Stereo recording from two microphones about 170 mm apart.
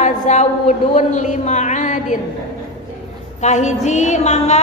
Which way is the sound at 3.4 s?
45° left (ahead or behind).